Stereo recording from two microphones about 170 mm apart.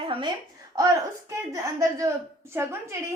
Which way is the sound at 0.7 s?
20° right (ahead or behind).